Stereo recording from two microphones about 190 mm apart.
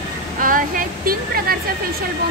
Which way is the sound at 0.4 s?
45° right (ahead or behind).